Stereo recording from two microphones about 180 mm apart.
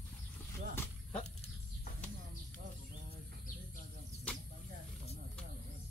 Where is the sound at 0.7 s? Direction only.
10° left (ahead or behind).